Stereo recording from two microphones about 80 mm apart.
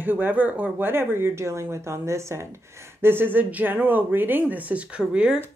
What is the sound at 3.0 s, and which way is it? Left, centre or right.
Speech, right.